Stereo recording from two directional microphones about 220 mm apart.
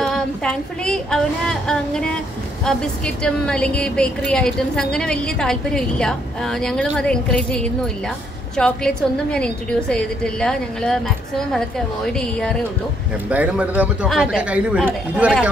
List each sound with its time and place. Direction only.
0.0 s a woman's voice: 5° left (ahead or behind)